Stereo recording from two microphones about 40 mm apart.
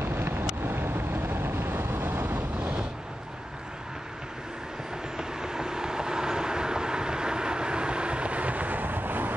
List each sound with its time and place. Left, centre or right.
0.0 s vehicle: right
0.7 s vehicle: right
5.1 s vehicle: centre; by 9.3 s right